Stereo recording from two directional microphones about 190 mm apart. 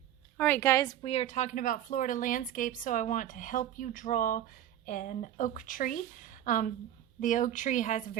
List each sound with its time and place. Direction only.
0.3 s a woman's voice: 10° left (ahead or behind)
1.0 s a woman's voice: 30° left (ahead or behind)